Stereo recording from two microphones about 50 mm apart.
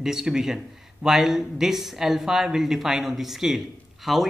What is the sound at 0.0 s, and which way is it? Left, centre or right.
Speech, centre.